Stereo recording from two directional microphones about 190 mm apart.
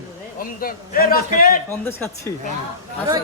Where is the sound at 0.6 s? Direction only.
50° left (ahead or behind).